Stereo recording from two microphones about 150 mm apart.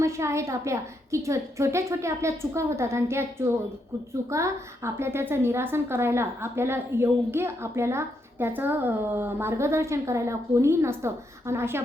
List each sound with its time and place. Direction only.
0.0 s a woman's voice: 20° right (ahead or behind)